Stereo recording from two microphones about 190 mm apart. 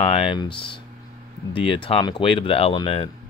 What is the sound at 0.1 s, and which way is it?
Speech, 25° left (ahead or behind).